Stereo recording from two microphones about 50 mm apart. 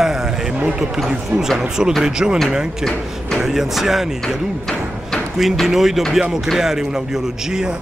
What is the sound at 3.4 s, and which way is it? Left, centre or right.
Speech, centre.